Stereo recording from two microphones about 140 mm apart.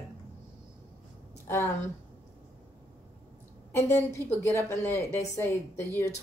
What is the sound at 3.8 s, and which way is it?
Speech, 20° left (ahead or behind).